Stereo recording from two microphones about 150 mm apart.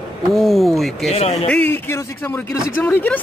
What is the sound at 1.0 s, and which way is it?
Speech, 45° left (ahead or behind).